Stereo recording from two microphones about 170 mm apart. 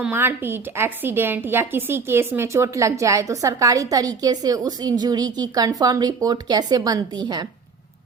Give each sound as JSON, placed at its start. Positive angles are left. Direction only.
{"t": 0.0, "sound": "a woman's voice", "side_deg": -10}